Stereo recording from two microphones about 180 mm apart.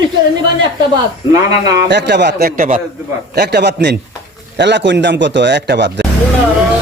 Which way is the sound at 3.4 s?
65° right (ahead or behind).